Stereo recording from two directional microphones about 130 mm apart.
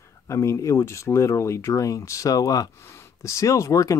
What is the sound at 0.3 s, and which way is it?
Speech, 25° left (ahead or behind).